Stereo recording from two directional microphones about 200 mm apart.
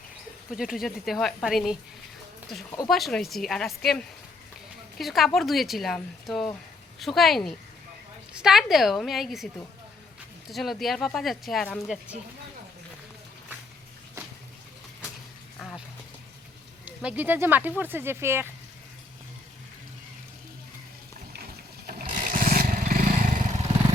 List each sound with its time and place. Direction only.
0.5 s speech: centre (ahead or behind)
10.5 s speech: centre (ahead or behind)
16.8 s speech: 5° right (ahead or behind)
21.8 s vehicle: 45° right (ahead or behind)